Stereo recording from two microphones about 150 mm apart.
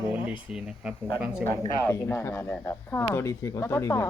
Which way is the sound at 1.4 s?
15° left (ahead or behind).